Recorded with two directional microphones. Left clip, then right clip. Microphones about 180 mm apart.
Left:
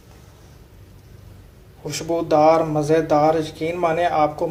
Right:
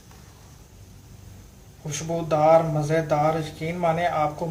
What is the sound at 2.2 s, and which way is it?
A man's voice, 30° left (ahead or behind).